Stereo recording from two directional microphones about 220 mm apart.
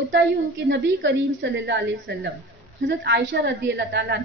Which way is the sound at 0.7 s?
50° right (ahead or behind).